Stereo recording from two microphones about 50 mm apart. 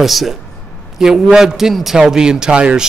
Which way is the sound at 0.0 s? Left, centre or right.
Centre.